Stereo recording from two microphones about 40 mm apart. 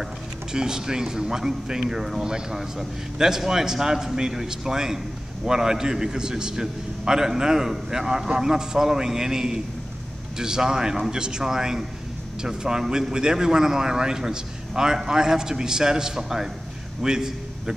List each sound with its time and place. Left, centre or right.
0.0 s a man's voice: centre